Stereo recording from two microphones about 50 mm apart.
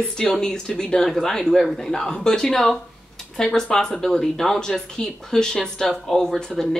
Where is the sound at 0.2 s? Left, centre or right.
Centre.